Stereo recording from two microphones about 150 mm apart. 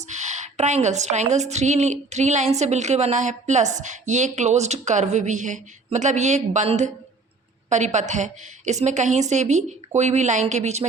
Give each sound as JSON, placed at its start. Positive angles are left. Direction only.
{"t": 0.0, "sound": "a woman's voice", "side_deg": -50}